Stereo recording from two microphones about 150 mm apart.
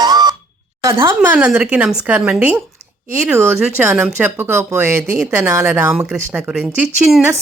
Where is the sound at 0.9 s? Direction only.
15° right (ahead or behind).